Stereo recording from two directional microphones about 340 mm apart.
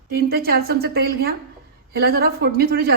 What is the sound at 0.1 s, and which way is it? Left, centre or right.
A woman's voice, right.